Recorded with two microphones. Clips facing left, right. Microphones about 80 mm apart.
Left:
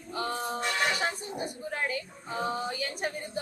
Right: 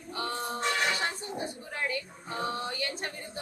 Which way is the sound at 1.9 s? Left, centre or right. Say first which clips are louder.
Left 1 dB; centre.